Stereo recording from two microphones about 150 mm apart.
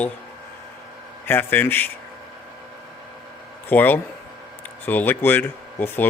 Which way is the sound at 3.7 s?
10° left (ahead or behind).